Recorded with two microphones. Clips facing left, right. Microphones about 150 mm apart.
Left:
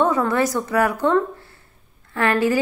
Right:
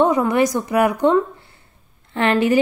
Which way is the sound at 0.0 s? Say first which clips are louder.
Right 3 dB; 15° right (ahead or behind).